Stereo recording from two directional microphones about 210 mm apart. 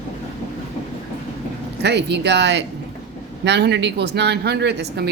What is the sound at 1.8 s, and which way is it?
Speech, 55° right (ahead or behind).